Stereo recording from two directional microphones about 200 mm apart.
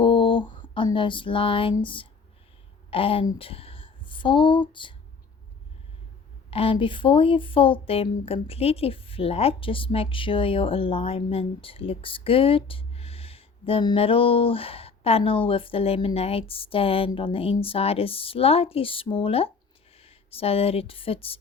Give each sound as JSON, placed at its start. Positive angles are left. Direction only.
{"t": 0.0, "sound": "a sound", "side_deg": 25}
{"t": 2.9, "sound": "speech", "side_deg": 25}
{"t": 6.5, "sound": "speech", "side_deg": 25}